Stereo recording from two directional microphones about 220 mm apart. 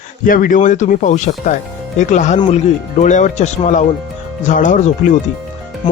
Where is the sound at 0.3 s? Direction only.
40° left (ahead or behind).